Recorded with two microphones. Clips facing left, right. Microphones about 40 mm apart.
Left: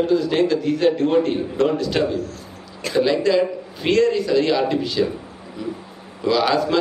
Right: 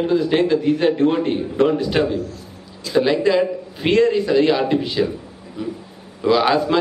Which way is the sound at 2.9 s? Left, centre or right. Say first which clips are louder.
Right 2 dB; left.